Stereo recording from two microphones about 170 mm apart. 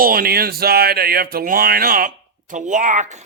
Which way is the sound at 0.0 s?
60° right (ahead or behind).